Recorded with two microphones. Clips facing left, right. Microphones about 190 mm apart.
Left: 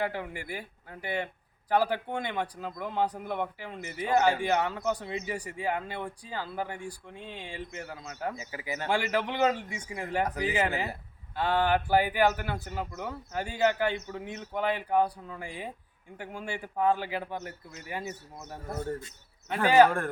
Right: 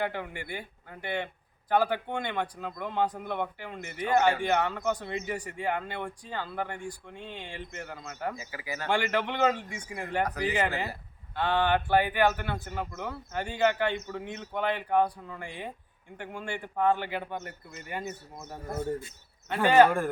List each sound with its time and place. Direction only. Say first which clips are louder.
0.0 s speech: even; 5° left (ahead or behind)
8.5 s speech: left 1 dB; 20° left (ahead or behind)
8.9 s speech: right 1 dB; 5° left (ahead or behind)
18.7 s speech: right 2 dB; 10° right (ahead or behind)